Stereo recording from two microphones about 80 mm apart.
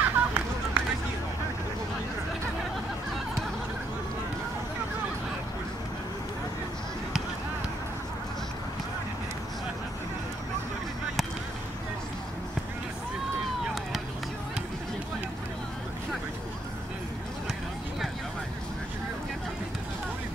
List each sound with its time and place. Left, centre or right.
0.0 s run: centre